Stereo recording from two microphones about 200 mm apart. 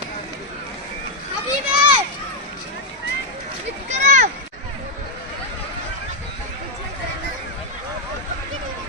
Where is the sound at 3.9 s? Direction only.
35° right (ahead or behind).